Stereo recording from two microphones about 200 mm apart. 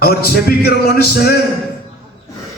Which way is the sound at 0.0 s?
50° left (ahead or behind).